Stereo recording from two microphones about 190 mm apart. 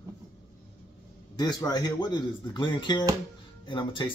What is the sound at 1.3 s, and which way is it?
Speech, 20° left (ahead or behind).